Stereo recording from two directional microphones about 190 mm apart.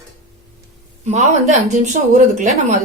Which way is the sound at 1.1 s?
35° right (ahead or behind).